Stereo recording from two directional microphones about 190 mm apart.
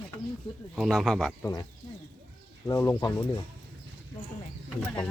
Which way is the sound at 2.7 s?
15° left (ahead or behind).